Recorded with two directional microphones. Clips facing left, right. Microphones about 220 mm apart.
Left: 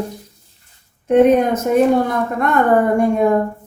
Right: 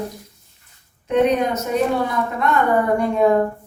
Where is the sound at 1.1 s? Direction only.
50° left (ahead or behind).